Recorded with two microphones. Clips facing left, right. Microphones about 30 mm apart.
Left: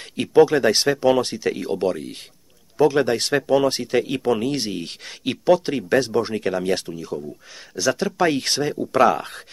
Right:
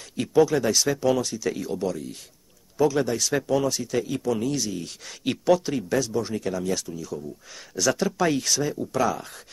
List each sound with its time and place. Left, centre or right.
0.1 s speech: left
5.2 s speech: centre
5.7 s speech: left
7.7 s speech: centre
8.4 s speech: left